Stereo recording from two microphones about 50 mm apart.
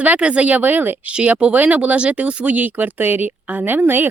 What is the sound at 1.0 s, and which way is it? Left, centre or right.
A woman's voice, right.